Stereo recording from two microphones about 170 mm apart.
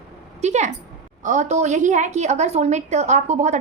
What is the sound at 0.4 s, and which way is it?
A woman's voice, 40° right (ahead or behind).